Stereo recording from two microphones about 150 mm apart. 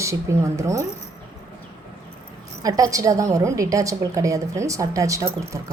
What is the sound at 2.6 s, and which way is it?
A woman's voice, 25° right (ahead or behind).